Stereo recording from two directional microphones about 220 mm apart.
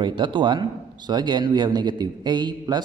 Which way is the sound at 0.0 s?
20° right (ahead or behind).